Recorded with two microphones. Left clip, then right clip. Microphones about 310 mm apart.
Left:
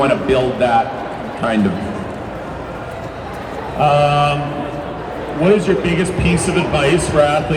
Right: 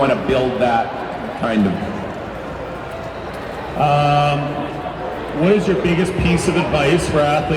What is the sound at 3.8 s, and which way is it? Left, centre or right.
Speech, left.